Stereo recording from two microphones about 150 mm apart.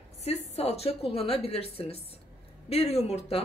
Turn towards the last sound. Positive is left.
turn(degrees=45)  # may be behind; listen again after turning